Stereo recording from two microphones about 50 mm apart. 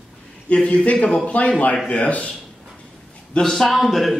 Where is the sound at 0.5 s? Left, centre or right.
Left.